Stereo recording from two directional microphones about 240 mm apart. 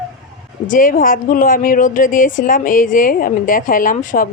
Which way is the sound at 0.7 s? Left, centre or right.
Left.